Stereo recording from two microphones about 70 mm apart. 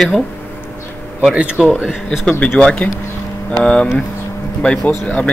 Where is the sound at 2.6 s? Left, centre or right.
Centre.